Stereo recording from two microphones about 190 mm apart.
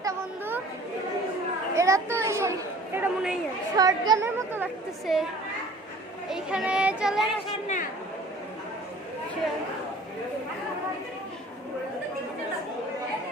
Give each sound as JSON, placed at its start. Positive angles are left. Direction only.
{"t": 0.0, "sound": "chatter", "side_deg": -15}
{"t": 1.7, "sound": "a woman's voice", "side_deg": -15}
{"t": 4.5, "sound": "speech", "side_deg": -5}
{"t": 6.2, "sound": "speech", "side_deg": 0}